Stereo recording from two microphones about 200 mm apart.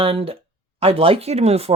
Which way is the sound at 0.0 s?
30° right (ahead or behind).